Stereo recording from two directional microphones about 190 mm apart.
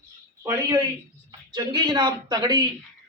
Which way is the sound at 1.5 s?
20° right (ahead or behind).